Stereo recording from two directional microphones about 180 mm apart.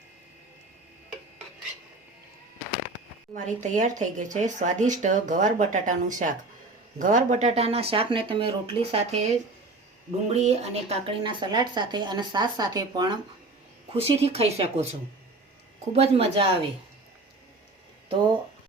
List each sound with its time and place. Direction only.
3.3 s speech: 45° right (ahead or behind)
10.2 s speech: 35° right (ahead or behind)
13.9 s speech: 35° right (ahead or behind)
15.9 s speech: 35° right (ahead or behind)